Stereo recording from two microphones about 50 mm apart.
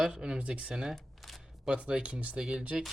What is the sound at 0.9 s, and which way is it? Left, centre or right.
Single-lens reflex camera, centre.